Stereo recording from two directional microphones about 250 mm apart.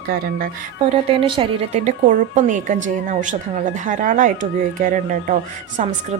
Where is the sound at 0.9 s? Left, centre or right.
Right.